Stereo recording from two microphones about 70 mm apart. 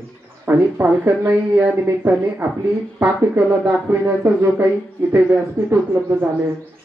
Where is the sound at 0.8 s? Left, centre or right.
Right.